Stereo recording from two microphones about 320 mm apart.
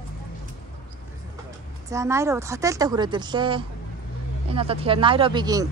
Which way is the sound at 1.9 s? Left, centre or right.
Centre.